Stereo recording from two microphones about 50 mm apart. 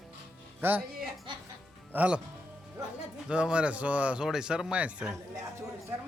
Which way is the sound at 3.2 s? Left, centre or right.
Centre.